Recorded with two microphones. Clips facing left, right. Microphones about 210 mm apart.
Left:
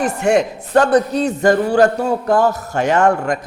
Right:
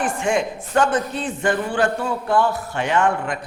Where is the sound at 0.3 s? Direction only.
35° left (ahead or behind).